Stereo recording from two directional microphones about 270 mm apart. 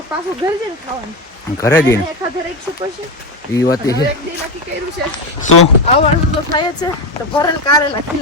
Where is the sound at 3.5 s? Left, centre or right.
Centre.